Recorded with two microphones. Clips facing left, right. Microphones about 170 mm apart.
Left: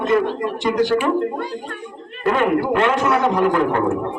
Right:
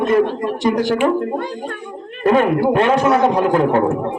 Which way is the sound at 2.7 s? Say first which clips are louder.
Right 3 dB; 40° right (ahead or behind).